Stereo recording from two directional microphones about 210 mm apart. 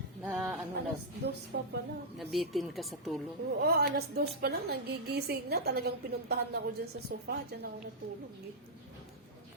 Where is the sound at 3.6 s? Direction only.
50° right (ahead or behind).